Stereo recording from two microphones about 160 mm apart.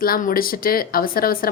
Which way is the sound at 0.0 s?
65° left (ahead or behind).